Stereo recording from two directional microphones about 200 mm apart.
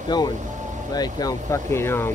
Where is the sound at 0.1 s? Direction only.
20° left (ahead or behind).